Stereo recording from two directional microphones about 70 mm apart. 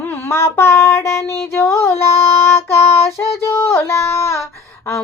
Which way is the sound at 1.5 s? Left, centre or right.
Left.